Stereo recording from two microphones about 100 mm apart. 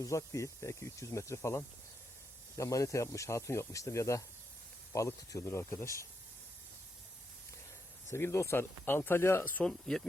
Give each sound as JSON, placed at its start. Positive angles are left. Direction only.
{"t": 0.0, "sound": "speech", "side_deg": 30}
{"t": 8.1, "sound": "speech", "side_deg": 25}
{"t": 9.4, "sound": "speech", "side_deg": 10}